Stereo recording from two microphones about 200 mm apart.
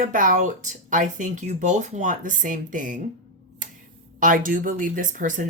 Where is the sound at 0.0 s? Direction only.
40° right (ahead or behind).